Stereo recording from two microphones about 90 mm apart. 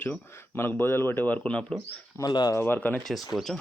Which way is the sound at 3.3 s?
5° left (ahead or behind).